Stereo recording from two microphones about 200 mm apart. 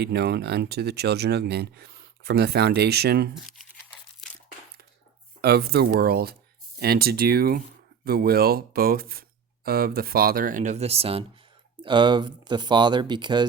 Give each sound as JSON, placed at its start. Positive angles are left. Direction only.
{"t": 0.0, "sound": "speech", "side_deg": -55}
{"t": 4.2, "sound": "a sound", "side_deg": 0}
{"t": 5.4, "sound": "speech", "side_deg": -50}